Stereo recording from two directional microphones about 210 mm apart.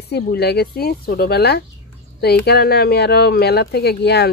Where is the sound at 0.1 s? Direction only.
50° left (ahead or behind).